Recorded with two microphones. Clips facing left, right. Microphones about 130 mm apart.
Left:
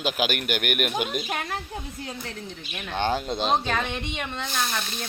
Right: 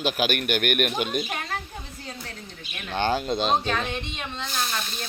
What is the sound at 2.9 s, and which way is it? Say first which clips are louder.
Speech: right 1 dB; centre (ahead or behind).